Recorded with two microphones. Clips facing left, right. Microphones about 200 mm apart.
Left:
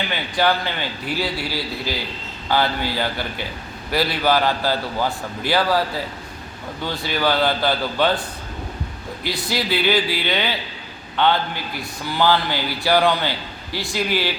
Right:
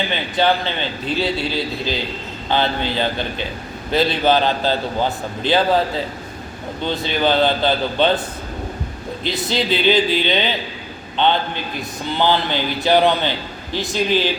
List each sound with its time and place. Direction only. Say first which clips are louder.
0.1 s a man's voice: even; 20° right (ahead or behind)
6.8 s a man's voice: right 3 dB; 20° right (ahead or behind)
9.2 s a man's voice: right 3 dB; 20° right (ahead or behind)